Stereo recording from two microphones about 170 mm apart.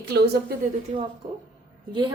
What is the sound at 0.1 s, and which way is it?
Speech, 70° right (ahead or behind).